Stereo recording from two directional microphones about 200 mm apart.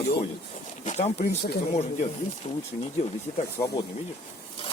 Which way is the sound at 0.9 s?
35° left (ahead or behind).